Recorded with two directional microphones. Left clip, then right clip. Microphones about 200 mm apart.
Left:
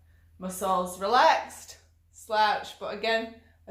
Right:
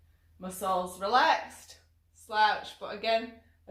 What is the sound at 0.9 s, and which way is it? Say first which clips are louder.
A woman's voice: left 4 dB; 30° left (ahead or behind).